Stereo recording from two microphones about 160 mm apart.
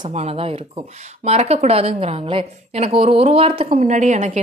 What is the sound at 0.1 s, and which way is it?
A woman's voice, 40° right (ahead or behind).